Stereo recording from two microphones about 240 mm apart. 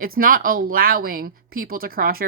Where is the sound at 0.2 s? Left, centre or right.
Right.